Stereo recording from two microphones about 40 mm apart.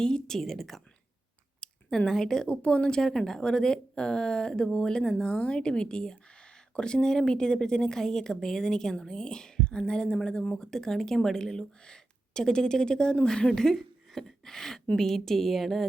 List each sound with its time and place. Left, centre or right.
0.0 s a woman's voice: centre
0.3 s speech: centre
1.6 s a sound: left
2.0 s speech: centre
2.5 s a woman's voice: left; by 15.9 s centre